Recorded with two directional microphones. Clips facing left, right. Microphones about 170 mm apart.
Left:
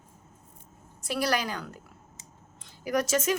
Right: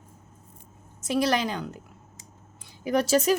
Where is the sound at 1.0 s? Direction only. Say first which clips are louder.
Right 4 dB; 20° right (ahead or behind).